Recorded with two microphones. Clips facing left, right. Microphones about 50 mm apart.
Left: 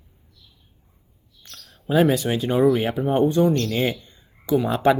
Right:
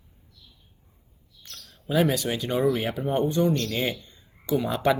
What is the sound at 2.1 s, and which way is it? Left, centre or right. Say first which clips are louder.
Speech: left 5 dB; left.